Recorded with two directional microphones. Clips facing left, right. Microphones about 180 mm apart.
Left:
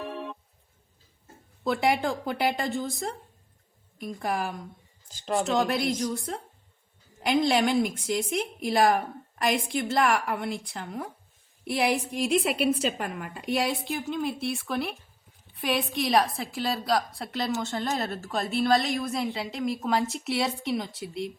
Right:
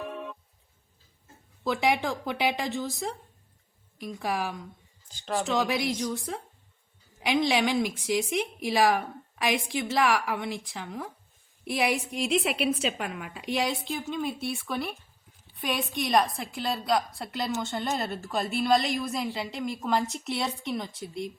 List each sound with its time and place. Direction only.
1.6 s a woman's voice: centre (ahead or behind)